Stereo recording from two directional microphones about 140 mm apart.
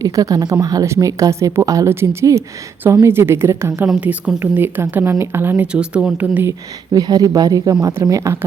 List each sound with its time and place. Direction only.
0.0 s a woman's voice: 25° right (ahead or behind)
3.8 s a woman's voice: 5° right (ahead or behind)
6.9 s a woman's voice: 25° right (ahead or behind)